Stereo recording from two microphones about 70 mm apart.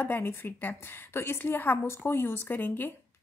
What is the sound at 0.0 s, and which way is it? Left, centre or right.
A woman's voice, left.